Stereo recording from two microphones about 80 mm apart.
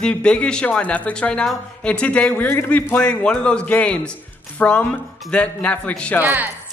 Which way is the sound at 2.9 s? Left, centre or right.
Centre.